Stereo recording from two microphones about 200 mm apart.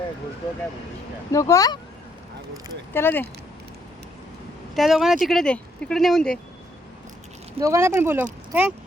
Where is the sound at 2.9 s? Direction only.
10° left (ahead or behind).